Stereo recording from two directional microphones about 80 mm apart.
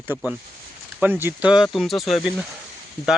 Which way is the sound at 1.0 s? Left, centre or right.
Right.